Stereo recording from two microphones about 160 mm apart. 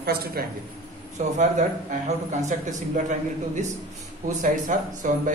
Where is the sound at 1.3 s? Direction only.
50° right (ahead or behind).